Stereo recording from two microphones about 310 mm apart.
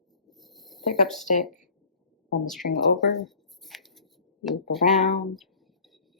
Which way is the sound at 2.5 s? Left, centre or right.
Centre.